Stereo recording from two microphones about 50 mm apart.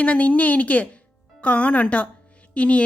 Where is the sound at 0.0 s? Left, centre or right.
Left.